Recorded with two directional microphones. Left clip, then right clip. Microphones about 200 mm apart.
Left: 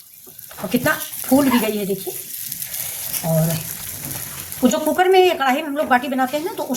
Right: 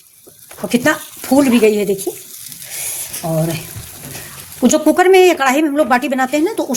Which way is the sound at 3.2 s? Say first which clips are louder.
Right 2 dB; 45° right (ahead or behind).